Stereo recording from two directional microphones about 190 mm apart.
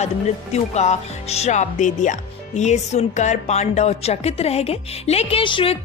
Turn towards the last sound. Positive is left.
turn(degrees=30)  # may be behind; listen again after turning